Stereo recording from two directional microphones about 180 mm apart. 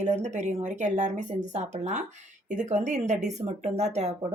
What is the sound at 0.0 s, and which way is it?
Speech, 40° right (ahead or behind).